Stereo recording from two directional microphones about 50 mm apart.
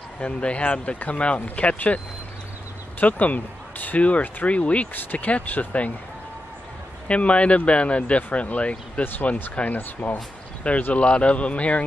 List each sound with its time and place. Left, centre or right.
0.2 s speech: left
3.0 s speech: left
7.1 s speech: left
9.0 s speech: left
10.8 s speech: left